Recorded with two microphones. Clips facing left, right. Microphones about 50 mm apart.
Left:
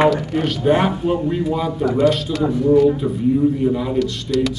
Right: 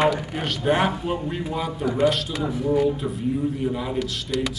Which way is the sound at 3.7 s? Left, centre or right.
Centre.